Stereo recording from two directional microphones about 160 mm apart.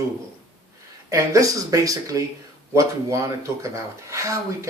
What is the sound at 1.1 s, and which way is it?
Speech, 20° right (ahead or behind).